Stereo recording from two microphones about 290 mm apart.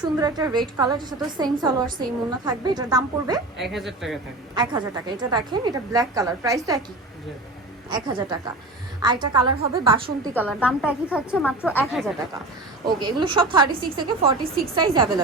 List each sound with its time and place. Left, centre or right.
0.0 s a woman's voice: centre
3.6 s a woman's voice: centre
4.5 s a woman's voice: centre
7.9 s a woman's voice: centre
10.3 s a woman's voice: centre
12.8 s a woman's voice: centre
14.8 s a woman's voice: centre